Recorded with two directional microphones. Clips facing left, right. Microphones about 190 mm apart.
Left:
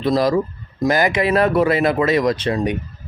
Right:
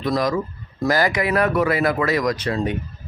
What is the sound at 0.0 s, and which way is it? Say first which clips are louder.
Speech: left 4 dB; 30° left (ahead or behind).